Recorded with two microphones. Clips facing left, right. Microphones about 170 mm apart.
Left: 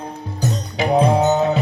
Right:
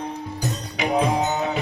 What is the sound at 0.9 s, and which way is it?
Music, 30° left (ahead or behind).